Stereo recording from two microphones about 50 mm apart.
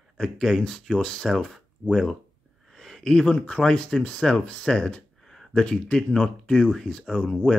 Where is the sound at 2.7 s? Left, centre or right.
Centre.